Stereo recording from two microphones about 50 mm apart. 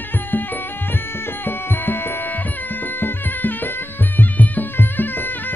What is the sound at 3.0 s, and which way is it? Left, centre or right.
Music, left.